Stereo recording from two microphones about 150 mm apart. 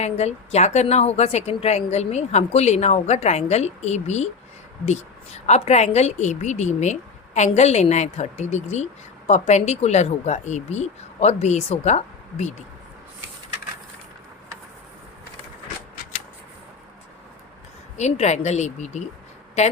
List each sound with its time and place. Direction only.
0.0 s speech: 45° left (ahead or behind)
17.9 s speech: 50° left (ahead or behind)